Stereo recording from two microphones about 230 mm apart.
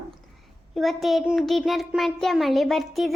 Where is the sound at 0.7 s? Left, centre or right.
Centre.